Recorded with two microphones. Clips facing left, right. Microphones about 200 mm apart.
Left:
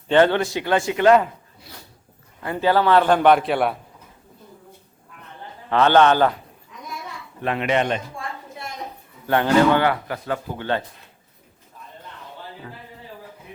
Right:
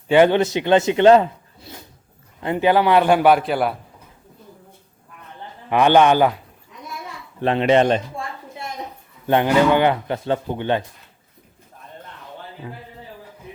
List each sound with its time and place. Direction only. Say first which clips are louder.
0.1 s a man's voice: right 3 dB; 15° right (ahead or behind)
5.6 s a man's voice: right 1 dB; 15° right (ahead or behind)
7.4 s speech: right 6 dB; 30° right (ahead or behind)
9.2 s speech: right 1 dB; 20° right (ahead or behind)
12.6 s a man's voice: right 4 dB; 15° right (ahead or behind)